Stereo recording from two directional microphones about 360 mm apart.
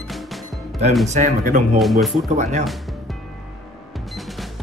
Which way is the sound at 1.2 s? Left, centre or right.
Right.